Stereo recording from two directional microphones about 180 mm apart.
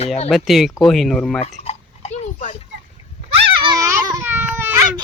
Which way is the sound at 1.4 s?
35° left (ahead or behind).